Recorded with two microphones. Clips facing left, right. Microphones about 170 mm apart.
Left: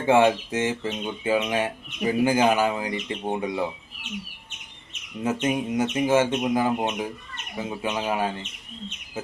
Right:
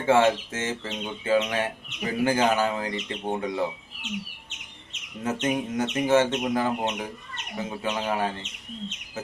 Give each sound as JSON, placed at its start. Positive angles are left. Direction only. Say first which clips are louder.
{"t": 0.0, "sound": "speech", "louder": "left 2 dB", "side_deg": 15}
{"t": 5.2, "sound": "speech", "louder": "left 2 dB", "side_deg": 15}